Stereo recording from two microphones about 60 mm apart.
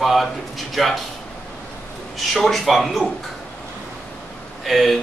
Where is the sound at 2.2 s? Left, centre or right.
Centre.